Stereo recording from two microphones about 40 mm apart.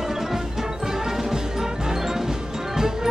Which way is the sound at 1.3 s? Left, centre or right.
Centre.